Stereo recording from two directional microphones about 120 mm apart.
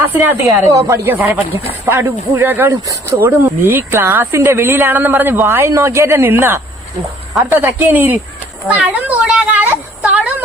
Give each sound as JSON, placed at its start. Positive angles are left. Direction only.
{"t": 0.1, "sound": "speech", "side_deg": -15}
{"t": 2.8, "sound": "speech", "side_deg": -30}
{"t": 3.2, "sound": "speech", "side_deg": -15}
{"t": 8.6, "sound": "a sound", "side_deg": -10}